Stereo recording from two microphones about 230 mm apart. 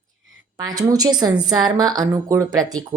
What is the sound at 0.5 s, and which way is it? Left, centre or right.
Speech, centre.